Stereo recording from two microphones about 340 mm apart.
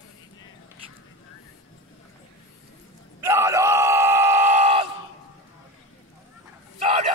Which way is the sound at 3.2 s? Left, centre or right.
Centre.